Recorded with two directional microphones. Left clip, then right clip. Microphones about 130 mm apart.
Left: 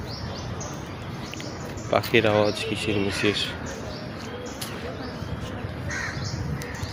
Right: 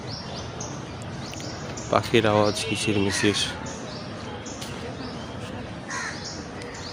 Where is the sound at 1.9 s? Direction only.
25° right (ahead or behind).